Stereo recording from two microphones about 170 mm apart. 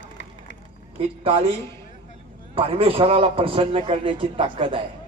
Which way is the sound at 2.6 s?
35° right (ahead or behind).